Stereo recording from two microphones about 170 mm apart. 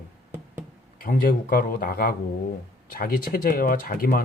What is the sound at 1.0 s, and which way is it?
Speech, 60° left (ahead or behind).